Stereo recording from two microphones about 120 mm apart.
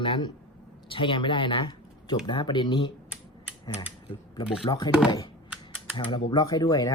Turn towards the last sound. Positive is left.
turn(degrees=25)  # may be behind; listen again after turning